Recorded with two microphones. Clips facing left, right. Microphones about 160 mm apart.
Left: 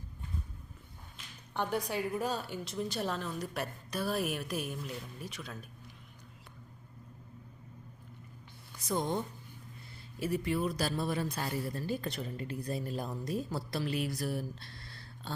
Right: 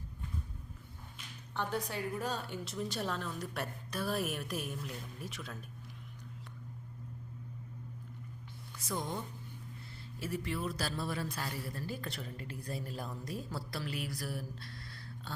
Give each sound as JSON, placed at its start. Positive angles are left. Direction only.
{"t": 1.5, "sound": "a woman's voice", "side_deg": 15}
{"t": 8.9, "sound": "speech", "side_deg": 20}